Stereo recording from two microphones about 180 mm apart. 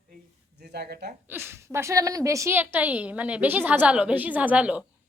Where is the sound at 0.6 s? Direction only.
65° right (ahead or behind).